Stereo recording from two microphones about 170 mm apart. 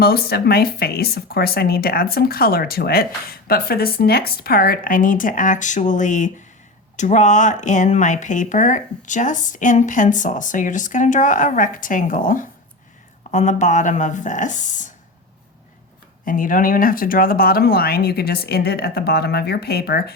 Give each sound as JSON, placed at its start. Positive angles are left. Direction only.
{"t": 0.0, "sound": "speech", "side_deg": 65}
{"t": 16.2, "sound": "speech", "side_deg": 55}